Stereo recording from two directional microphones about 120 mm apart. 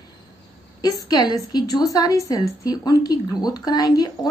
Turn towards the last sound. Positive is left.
turn(degrees=35)  # may be behind; listen again after turning